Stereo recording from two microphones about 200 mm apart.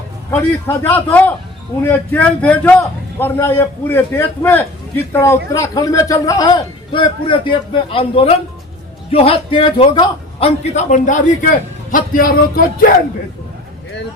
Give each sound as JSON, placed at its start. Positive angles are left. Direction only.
{"t": 0.3, "sound": "a man's voice", "side_deg": 10}
{"t": 10.8, "sound": "a man's voice", "side_deg": 40}